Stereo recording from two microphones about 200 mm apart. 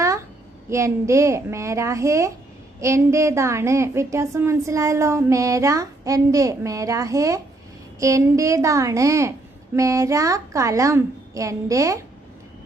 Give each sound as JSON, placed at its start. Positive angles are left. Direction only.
{"t": 0.7, "sound": "a woman's voice", "side_deg": -15}